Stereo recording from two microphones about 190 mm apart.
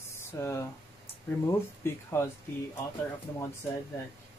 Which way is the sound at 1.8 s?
15° left (ahead or behind).